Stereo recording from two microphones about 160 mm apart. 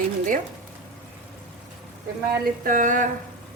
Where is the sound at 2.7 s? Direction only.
55° right (ahead or behind).